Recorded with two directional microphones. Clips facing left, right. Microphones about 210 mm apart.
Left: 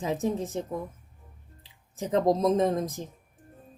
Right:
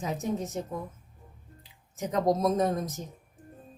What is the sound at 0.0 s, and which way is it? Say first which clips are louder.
Speech: left 3 dB; 30° left (ahead or behind).